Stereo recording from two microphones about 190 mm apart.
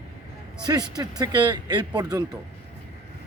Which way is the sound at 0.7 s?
20° right (ahead or behind).